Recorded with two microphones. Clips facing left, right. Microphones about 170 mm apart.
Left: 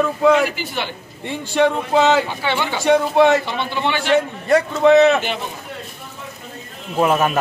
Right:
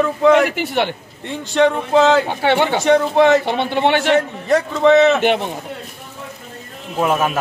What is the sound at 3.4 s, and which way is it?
Speech, 60° right (ahead or behind).